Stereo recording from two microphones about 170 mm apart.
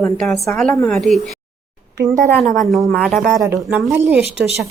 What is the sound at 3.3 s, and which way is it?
Speech, 15° right (ahead or behind).